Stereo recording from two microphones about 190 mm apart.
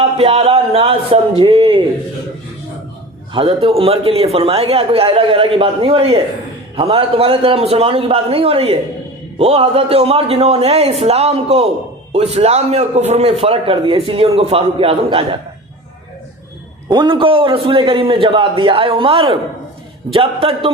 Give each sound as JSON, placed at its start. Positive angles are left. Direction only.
{"t": 0.2, "sound": "a man's voice", "side_deg": -30}
{"t": 3.3, "sound": "a man's voice", "side_deg": -30}
{"t": 16.9, "sound": "a man's voice", "side_deg": -25}